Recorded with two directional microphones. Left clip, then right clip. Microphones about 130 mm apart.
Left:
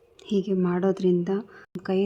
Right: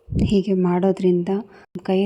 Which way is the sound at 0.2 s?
40° right (ahead or behind).